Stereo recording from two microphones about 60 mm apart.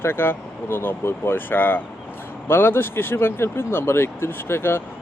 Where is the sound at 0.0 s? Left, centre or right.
Left.